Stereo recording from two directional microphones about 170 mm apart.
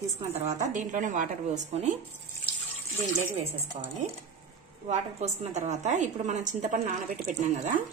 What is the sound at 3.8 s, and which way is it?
A woman's voice, 35° right (ahead or behind).